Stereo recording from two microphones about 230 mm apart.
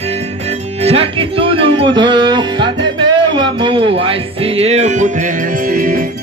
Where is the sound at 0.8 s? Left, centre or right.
Right.